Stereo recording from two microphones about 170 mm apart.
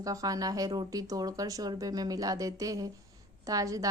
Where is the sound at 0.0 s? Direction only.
20° right (ahead or behind).